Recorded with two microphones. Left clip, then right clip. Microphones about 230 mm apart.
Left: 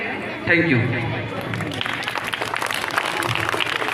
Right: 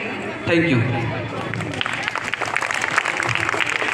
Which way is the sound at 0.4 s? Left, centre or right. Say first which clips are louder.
Left 1 dB; left.